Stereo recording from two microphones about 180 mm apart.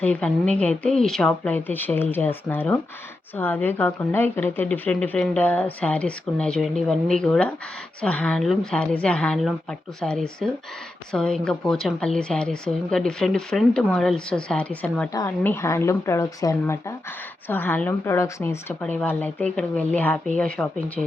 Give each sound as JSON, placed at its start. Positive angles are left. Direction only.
{"t": 0.0, "sound": "speech", "side_deg": 5}
{"t": 15.1, "sound": "speech", "side_deg": 15}